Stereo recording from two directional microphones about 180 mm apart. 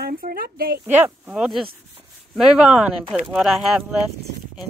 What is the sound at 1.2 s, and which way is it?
Speech, centre (ahead or behind).